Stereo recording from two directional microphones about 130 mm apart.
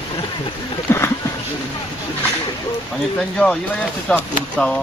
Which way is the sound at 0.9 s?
20° left (ahead or behind).